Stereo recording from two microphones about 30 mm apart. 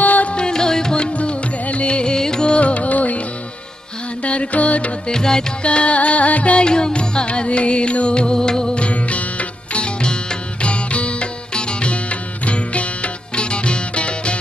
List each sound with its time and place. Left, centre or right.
0.0 s music: left
0.3 s music: left
0.6 s music: left
1.1 s music: left
2.1 s music: left
2.5 s music: left
4.2 s mantra: left
5.0 s music: left
5.6 s music: left
6.6 s music: left
8.7 s music: left